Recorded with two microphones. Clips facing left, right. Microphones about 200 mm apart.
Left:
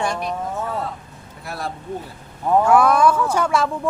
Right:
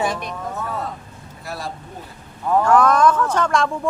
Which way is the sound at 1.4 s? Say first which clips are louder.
Left 1 dB; 60° left (ahead or behind).